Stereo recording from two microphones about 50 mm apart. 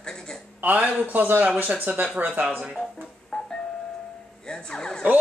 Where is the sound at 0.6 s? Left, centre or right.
Right.